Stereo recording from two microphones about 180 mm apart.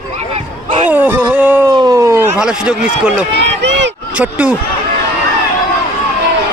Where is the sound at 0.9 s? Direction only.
10° right (ahead or behind).